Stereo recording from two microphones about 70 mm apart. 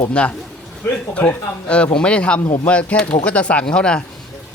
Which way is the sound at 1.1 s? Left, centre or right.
Left.